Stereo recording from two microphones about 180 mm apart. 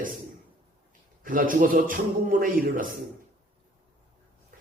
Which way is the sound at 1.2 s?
50° right (ahead or behind).